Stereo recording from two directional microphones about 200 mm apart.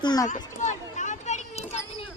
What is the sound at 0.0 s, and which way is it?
Speech, 20° left (ahead or behind).